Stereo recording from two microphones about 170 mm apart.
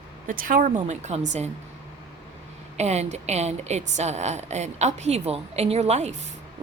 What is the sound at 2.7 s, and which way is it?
A woman's voice, 40° right (ahead or behind).